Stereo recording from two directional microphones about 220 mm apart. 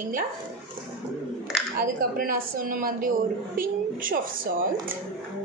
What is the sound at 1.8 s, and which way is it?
A woman's voice, 40° right (ahead or behind).